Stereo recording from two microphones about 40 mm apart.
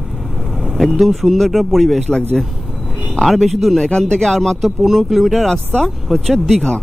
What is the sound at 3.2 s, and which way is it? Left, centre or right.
Speech, centre.